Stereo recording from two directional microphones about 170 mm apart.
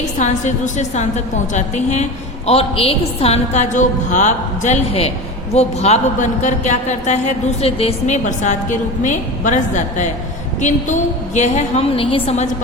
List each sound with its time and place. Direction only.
0.0 s a man's voice: 45° left (ahead or behind)